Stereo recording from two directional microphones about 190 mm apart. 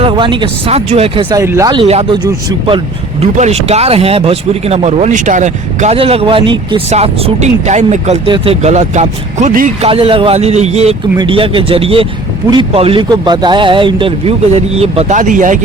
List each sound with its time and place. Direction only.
0.0 s speech: 25° right (ahead or behind)
1.4 s speech: 15° right (ahead or behind)
1.9 s speech: 30° right (ahead or behind)
9.9 s speech: 30° right (ahead or behind)